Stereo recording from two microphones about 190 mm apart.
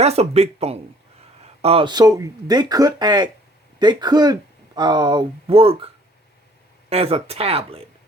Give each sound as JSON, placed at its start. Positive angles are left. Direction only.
{"t": 0.0, "sound": "speech", "side_deg": -35}
{"t": 6.9, "sound": "speech", "side_deg": -30}